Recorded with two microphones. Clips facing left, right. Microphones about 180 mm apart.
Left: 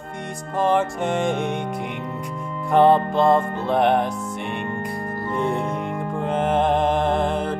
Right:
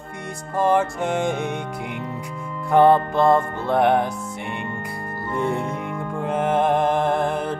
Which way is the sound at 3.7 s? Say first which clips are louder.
Right 1 dB; 5° right (ahead or behind).